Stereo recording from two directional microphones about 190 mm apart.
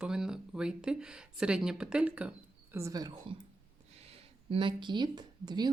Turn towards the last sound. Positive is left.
turn(degrees=-20)  # may be behind; listen again after turning